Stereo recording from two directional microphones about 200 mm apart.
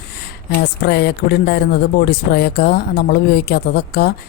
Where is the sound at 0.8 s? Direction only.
55° left (ahead or behind).